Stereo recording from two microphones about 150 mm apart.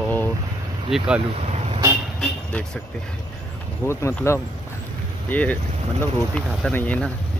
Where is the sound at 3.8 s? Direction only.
15° left (ahead or behind).